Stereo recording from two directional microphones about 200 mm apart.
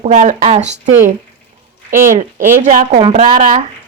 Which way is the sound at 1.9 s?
40° right (ahead or behind).